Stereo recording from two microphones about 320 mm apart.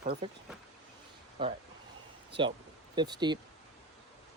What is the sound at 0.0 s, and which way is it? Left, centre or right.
Speech, right.